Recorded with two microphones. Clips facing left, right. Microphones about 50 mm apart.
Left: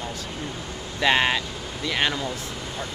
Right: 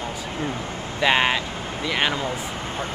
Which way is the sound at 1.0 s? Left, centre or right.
Centre.